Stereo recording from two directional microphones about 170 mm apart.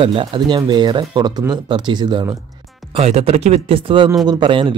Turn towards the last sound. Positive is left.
turn(degrees=-30)  # may be behind; listen again after turning